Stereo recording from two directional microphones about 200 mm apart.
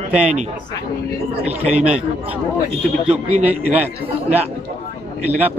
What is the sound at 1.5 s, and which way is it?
Speech, 30° right (ahead or behind).